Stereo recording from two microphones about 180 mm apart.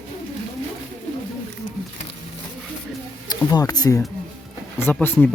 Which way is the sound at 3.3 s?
20° left (ahead or behind).